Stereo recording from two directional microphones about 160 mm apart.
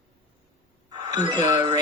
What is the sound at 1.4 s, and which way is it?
Child singing, 20° right (ahead or behind).